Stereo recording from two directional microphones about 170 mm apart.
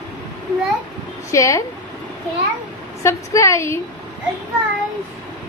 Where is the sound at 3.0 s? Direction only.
15° left (ahead or behind).